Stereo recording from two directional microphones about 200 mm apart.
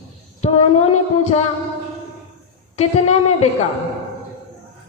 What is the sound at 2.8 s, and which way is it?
Speech, 30° left (ahead or behind).